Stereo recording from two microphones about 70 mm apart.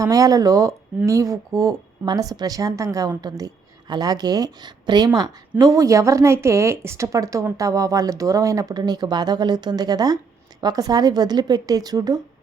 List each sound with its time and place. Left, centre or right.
0.0 s a woman's voice: right
3.2 s a woman's voice: right
8.7 s a woman's voice: right